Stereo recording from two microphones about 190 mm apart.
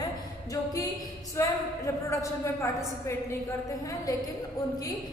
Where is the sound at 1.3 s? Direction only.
15° left (ahead or behind).